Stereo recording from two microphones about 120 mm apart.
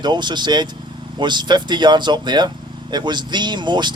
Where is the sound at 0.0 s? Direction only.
40° right (ahead or behind).